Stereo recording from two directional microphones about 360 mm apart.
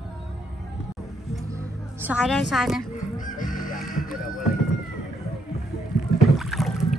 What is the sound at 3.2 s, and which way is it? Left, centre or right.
Fowl, left.